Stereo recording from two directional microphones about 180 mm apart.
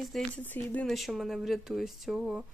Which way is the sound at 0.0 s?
5° left (ahead or behind).